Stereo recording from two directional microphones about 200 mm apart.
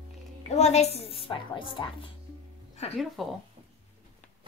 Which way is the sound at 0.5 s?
35° left (ahead or behind).